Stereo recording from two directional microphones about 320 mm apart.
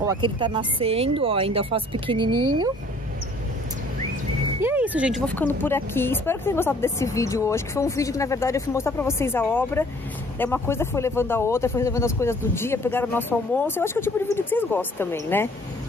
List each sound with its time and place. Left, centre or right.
0.0 s speech: centre
4.6 s speech: centre